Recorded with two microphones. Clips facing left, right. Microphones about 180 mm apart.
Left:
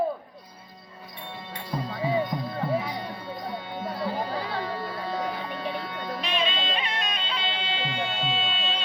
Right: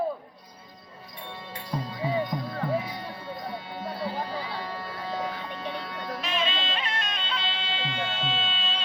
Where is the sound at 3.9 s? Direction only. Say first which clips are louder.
Left 2 dB; 50° left (ahead or behind).